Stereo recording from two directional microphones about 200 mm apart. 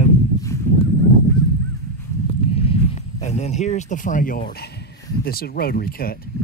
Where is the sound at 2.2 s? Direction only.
30° left (ahead or behind).